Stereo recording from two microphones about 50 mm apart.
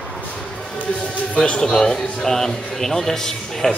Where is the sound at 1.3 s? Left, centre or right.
Left.